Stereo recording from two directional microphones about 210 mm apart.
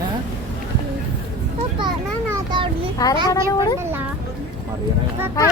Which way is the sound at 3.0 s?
20° left (ahead or behind).